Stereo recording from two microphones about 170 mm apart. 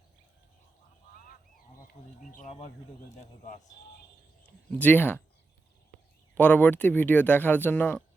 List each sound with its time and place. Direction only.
1.1 s honk: 55° left (ahead or behind)
3.2 s speech: 45° left (ahead or behind)
4.8 s speech: 10° left (ahead or behind)
6.3 s speech: 10° left (ahead or behind)